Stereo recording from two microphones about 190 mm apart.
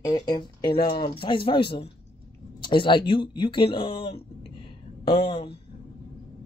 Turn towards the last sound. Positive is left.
turn(degrees=25)  # may be behind; listen again after turning